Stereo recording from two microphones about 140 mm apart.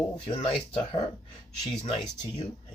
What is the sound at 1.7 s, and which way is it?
Speech, 50° left (ahead or behind).